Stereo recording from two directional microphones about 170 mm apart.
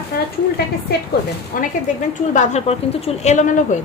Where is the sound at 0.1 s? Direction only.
65° left (ahead or behind).